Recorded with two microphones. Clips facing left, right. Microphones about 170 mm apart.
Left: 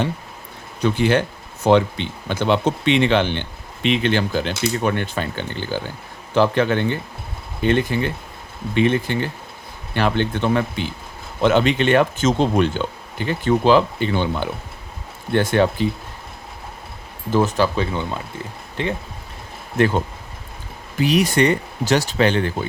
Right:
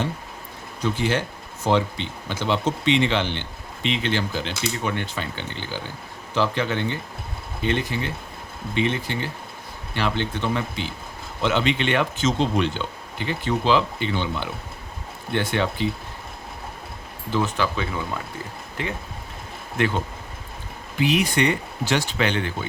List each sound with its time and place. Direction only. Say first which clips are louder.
0.8 s speech: left 6 dB; 65° left (ahead or behind); by 15.9 s 45° left (ahead or behind)
17.3 s speech: left 6 dB; 40° left (ahead or behind)
21.0 s speech: left 4 dB; 40° left (ahead or behind)